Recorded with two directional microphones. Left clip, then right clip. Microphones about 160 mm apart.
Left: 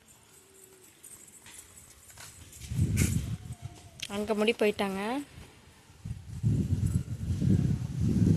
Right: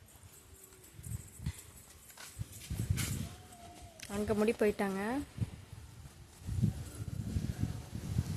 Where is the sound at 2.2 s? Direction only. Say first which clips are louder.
Left 2 dB; 90° left.